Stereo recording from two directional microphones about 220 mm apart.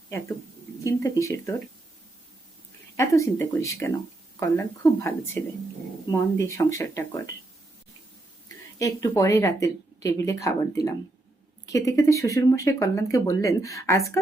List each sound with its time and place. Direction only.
0.9 s speech: 15° left (ahead or behind)
3.0 s speech: 15° left (ahead or behind)
8.8 s speech: 15° left (ahead or behind)